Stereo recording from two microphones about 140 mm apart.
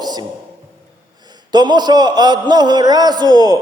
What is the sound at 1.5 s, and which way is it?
A man's voice, 30° right (ahead or behind).